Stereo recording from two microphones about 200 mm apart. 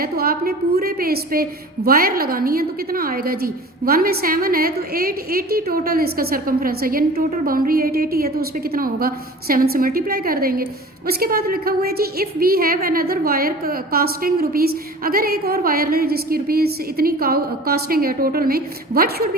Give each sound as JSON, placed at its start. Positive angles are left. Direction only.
{"t": 0.0, "sound": "a woman's voice", "side_deg": -50}